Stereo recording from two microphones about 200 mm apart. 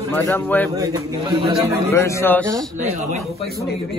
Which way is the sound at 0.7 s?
20° right (ahead or behind).